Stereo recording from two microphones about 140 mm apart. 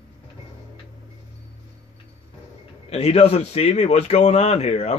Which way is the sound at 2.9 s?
50° left (ahead or behind).